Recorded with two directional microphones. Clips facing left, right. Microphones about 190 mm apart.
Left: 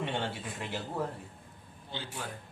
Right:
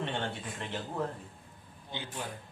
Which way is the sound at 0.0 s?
10° left (ahead or behind).